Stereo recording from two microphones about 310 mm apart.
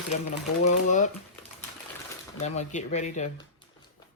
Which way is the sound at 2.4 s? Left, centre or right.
Left.